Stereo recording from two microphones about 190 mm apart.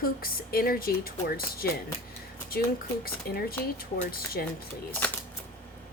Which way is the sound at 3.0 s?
50° left (ahead or behind).